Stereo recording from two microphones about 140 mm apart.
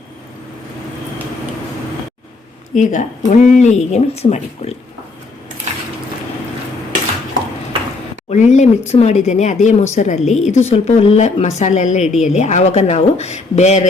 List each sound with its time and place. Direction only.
2.7 s a woman's voice: 60° left (ahead or behind)
8.3 s a woman's voice: 55° left (ahead or behind)